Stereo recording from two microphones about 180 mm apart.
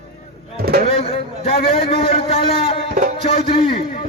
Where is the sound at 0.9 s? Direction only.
30° left (ahead or behind).